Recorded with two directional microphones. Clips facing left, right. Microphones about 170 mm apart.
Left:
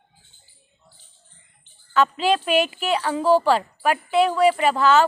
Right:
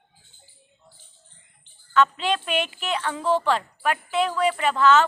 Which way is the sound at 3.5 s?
10° left (ahead or behind).